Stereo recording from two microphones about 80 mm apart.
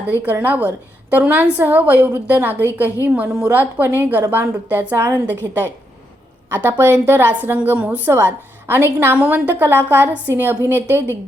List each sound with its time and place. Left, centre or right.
0.3 s a woman's voice: right
6.5 s a woman's voice: right